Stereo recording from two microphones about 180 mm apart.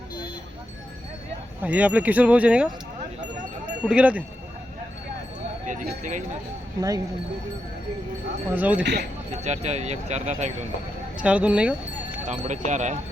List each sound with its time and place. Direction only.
1.6 s speech: 10° right (ahead or behind)
3.8 s speech: 5° right (ahead or behind)
5.6 s speech: 45° right (ahead or behind)
6.7 s speech: 20° right (ahead or behind)
8.5 s speech: 10° right (ahead or behind)
8.8 s speech: 70° right (ahead or behind)
9.4 s speech: 40° right (ahead or behind)
11.2 s speech: 5° right (ahead or behind)
12.3 s speech: 40° right (ahead or behind)